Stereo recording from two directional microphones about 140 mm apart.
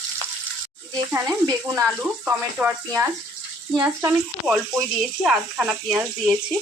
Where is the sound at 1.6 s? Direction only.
20° right (ahead or behind).